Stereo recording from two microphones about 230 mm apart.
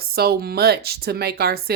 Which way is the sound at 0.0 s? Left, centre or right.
Right.